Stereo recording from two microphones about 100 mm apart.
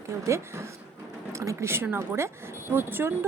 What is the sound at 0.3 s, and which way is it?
A woman's voice, 30° right (ahead or behind).